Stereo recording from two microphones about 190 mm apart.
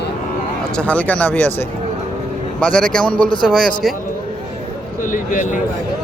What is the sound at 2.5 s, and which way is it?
Speech, 5° left (ahead or behind).